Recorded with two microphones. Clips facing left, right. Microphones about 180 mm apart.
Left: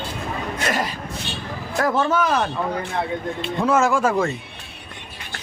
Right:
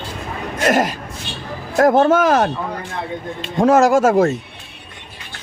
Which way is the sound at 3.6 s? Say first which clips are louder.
Right 6 dB; 40° right (ahead or behind).